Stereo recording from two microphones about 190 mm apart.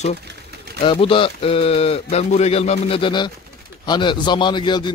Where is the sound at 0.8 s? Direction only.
30° left (ahead or behind).